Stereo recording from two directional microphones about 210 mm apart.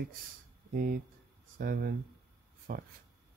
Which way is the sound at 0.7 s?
40° right (ahead or behind).